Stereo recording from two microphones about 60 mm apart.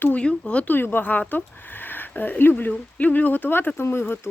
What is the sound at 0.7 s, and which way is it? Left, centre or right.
Speech, left.